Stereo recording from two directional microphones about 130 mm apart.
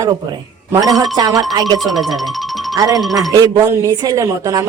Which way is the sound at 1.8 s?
Centre (ahead or behind).